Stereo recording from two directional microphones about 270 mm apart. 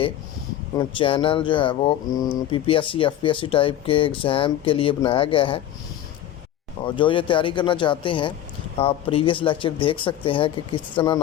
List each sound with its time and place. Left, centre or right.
0.8 s speech: centre
6.8 s speech: centre